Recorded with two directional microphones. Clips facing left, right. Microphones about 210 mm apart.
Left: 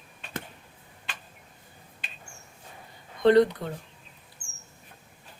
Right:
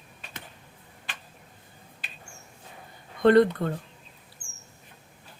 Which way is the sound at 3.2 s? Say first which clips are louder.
Right 1 dB; 55° right (ahead or behind).